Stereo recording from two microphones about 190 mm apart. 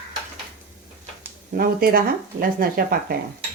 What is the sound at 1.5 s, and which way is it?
Speech, 50° right (ahead or behind).